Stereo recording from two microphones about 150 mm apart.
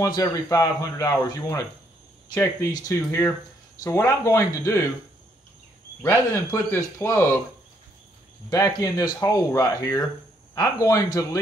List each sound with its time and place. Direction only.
0.0 s speech: 25° left (ahead or behind)
6.0 s speech: 20° left (ahead or behind)
8.5 s speech: 25° left (ahead or behind)